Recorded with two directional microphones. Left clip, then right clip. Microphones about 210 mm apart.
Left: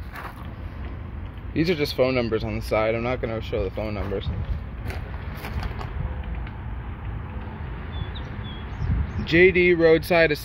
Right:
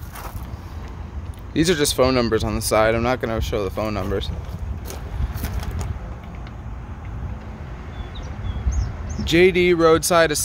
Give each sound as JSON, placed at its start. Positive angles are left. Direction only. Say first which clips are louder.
{"t": 1.5, "sound": "speech", "louder": "right 5 dB", "side_deg": -20}
{"t": 9.2, "sound": "speech", "louder": "right 1 dB", "side_deg": -15}